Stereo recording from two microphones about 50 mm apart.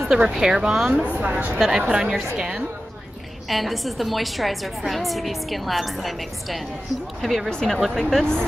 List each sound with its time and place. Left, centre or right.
0.2 s speech: centre
1.0 s a woman's voice: right
3.4 s a woman's voice: centre
7.4 s speech: centre
7.7 s a woman's voice: centre
8.0 s speech: centre